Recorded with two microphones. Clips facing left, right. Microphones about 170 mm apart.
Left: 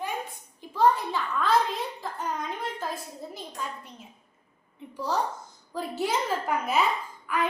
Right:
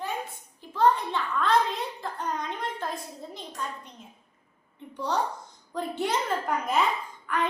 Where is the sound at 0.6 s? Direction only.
10° left (ahead or behind).